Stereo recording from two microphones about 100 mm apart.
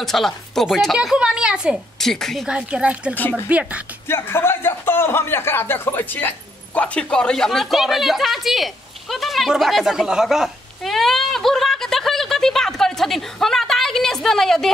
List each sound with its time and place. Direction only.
0.0 s speech: 5° left (ahead or behind)
1.0 s speech: 10° right (ahead or behind)
2.0 s a woman's voice: 5° left (ahead or behind)
2.4 s speech: 10° right (ahead or behind)
3.2 s speech: 20° left (ahead or behind)
3.4 s speech: 15° right (ahead or behind)
4.1 s a man's voice: 25° left (ahead or behind); by 14.7 s 5° left (ahead or behind)